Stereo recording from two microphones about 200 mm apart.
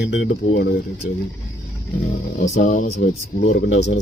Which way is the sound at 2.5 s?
40° left (ahead or behind).